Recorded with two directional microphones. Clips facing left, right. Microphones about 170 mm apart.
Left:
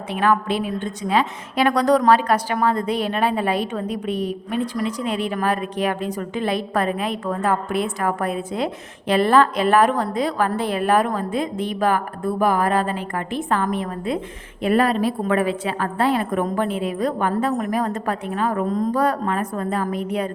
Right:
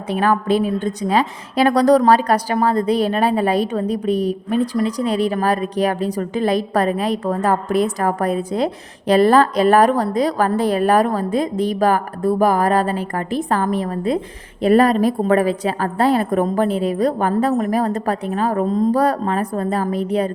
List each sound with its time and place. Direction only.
0.1 s a woman's voice: 40° right (ahead or behind)